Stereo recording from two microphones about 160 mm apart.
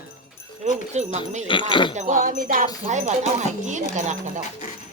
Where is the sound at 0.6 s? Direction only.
45° right (ahead or behind).